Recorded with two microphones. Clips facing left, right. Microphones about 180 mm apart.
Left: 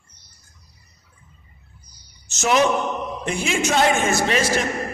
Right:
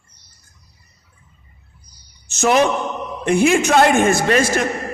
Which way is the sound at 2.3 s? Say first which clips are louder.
Right 3 dB; 55° right (ahead or behind).